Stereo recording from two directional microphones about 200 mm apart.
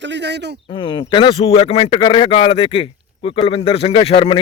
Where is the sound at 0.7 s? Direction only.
25° left (ahead or behind).